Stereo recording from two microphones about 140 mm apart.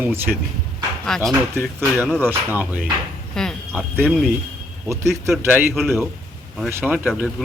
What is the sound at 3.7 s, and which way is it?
Speech, 10° right (ahead or behind).